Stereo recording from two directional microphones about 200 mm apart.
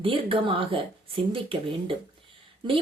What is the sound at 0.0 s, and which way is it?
Speech, 25° right (ahead or behind).